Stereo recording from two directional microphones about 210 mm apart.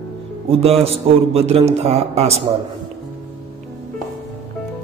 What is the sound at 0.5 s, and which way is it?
A man's voice, 30° right (ahead or behind).